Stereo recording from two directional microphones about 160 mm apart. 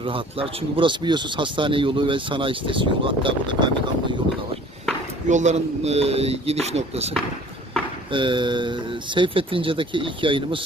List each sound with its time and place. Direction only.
0.0 s speech: 35° right (ahead or behind)
5.3 s speech: 45° right (ahead or behind)
8.1 s speech: 30° right (ahead or behind)